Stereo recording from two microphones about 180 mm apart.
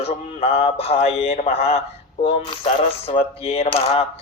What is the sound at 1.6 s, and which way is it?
Speech, 35° left (ahead or behind).